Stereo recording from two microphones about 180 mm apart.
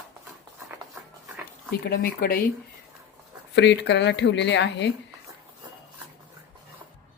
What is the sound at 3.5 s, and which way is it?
Speech, 75° left (ahead or behind).